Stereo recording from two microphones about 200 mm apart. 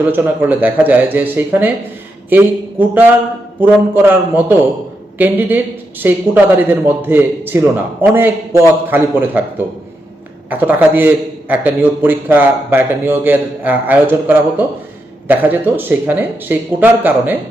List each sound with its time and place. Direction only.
0.0 s a man's voice: 10° right (ahead or behind)
10.5 s a man's voice: 10° right (ahead or behind)